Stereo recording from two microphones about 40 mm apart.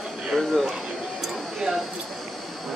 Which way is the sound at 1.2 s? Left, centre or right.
Centre.